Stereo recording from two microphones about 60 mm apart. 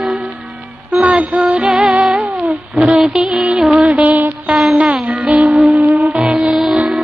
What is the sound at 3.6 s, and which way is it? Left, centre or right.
Music, right.